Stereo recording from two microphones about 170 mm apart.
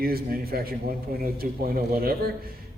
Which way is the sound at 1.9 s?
60° right (ahead or behind).